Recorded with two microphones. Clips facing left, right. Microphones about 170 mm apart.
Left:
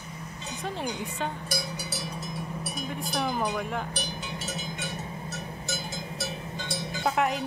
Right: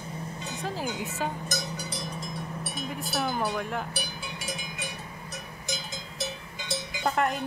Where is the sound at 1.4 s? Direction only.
10° left (ahead or behind).